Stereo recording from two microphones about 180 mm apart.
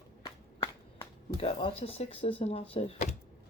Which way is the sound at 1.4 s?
30° left (ahead or behind).